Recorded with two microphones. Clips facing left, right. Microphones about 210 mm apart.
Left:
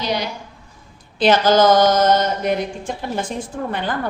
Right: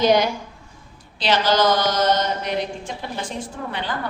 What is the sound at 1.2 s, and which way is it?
Speech, 50° left (ahead or behind).